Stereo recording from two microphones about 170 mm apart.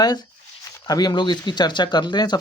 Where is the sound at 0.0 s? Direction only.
25° left (ahead or behind).